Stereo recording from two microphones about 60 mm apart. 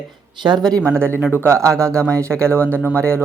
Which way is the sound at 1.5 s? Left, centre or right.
Right.